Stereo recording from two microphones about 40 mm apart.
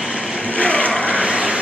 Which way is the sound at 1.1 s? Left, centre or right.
Right.